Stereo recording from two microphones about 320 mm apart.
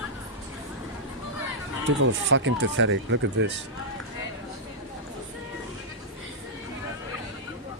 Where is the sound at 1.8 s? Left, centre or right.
Right.